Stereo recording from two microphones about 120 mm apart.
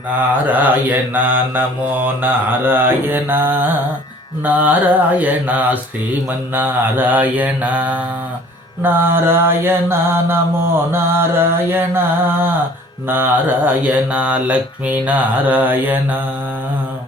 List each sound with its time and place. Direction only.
0.4 s mantra: 15° right (ahead or behind)